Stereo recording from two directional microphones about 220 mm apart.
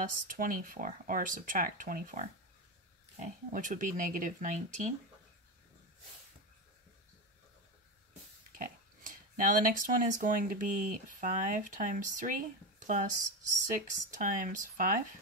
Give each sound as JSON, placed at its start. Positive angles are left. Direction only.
{"t": 0.1, "sound": "speech", "side_deg": -40}
{"t": 8.5, "sound": "speech", "side_deg": -40}